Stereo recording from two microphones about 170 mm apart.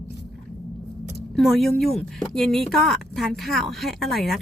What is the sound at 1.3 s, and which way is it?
Speech, centre (ahead or behind).